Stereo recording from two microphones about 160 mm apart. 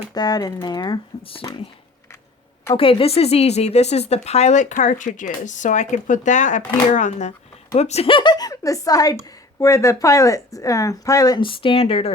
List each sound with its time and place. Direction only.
0.1 s a woman's voice: 25° left (ahead or behind)
2.7 s a woman's voice: 35° left (ahead or behind)